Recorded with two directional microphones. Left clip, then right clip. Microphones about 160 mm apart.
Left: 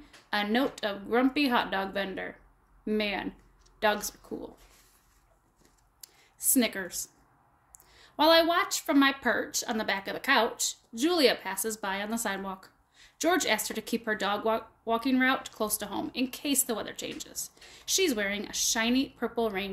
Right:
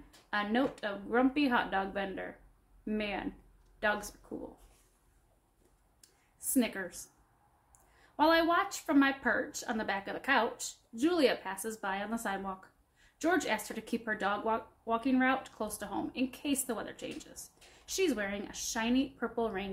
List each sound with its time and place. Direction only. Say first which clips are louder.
0.3 s speech: left 4 dB; 35° left (ahead or behind)
6.0 s a sound: left 12 dB; 35° left (ahead or behind)
6.5 s speech: left 4 dB; 40° left (ahead or behind)
8.2 s speech: left 5 dB; 35° left (ahead or behind)